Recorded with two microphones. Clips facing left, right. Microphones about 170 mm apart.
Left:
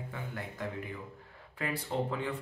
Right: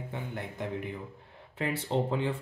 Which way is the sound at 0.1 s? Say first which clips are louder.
Right 5 dB; 25° right (ahead or behind).